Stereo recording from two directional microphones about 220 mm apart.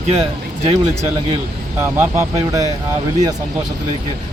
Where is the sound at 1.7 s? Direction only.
10° right (ahead or behind).